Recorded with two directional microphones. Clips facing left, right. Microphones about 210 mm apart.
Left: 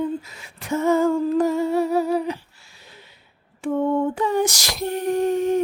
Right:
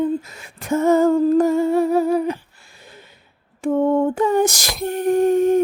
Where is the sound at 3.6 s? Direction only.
45° right (ahead or behind).